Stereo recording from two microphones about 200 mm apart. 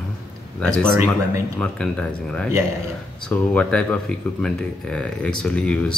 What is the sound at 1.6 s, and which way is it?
Speech, 5° left (ahead or behind).